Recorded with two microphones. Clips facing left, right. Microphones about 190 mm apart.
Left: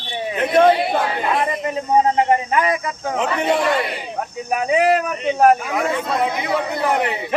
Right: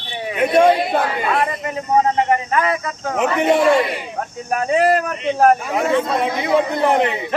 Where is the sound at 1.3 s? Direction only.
20° left (ahead or behind).